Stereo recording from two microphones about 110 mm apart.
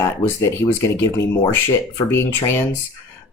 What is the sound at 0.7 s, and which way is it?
Speech, 25° left (ahead or behind).